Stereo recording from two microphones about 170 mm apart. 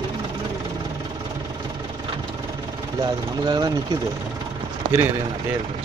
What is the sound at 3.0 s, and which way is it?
Speech, 25° right (ahead or behind).